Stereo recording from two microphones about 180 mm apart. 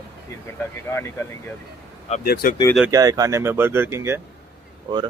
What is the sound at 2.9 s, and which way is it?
Speech, 20° right (ahead or behind).